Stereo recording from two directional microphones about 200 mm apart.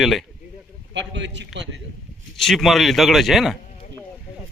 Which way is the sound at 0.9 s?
65° right (ahead or behind).